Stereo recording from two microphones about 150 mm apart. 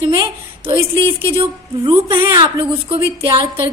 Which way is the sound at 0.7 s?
35° right (ahead or behind).